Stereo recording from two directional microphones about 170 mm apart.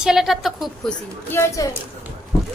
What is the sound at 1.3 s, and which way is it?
Speech, 15° left (ahead or behind).